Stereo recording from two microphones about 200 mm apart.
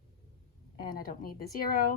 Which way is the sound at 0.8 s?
45° left (ahead or behind).